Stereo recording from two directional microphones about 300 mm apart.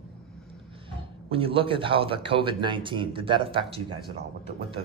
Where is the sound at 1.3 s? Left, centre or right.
Centre.